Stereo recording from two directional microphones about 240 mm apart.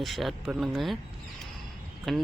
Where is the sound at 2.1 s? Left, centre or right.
Centre.